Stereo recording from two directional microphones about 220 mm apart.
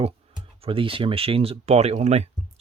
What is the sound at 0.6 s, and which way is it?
Speech, 25° right (ahead or behind).